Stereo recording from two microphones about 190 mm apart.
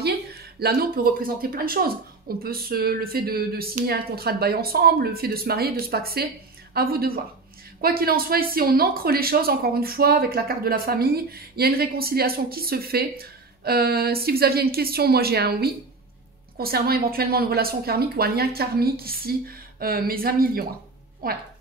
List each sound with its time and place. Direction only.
0.0 s speech: 55° right (ahead or behind)